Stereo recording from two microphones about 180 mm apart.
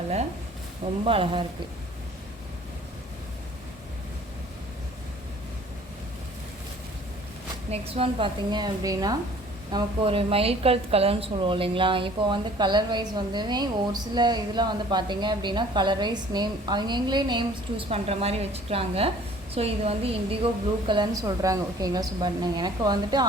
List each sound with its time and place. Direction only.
1.0 s a woman's voice: 30° right (ahead or behind)
7.7 s a woman's voice: 30° right (ahead or behind)
9.7 s a woman's voice: 30° right (ahead or behind)